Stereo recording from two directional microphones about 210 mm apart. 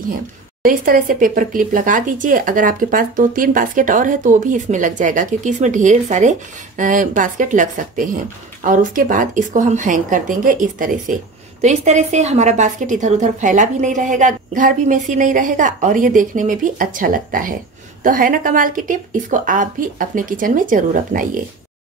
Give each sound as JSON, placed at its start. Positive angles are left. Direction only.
{"t": 0.7, "sound": "a woman's voice", "side_deg": -40}